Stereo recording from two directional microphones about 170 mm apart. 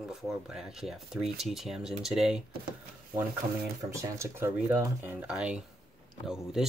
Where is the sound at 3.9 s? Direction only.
15° right (ahead or behind).